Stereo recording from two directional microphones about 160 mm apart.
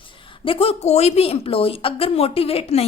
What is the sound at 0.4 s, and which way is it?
A woman's voice, 35° left (ahead or behind).